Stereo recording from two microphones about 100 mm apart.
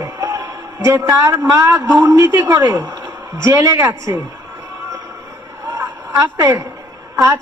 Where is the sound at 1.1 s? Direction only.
30° right (ahead or behind).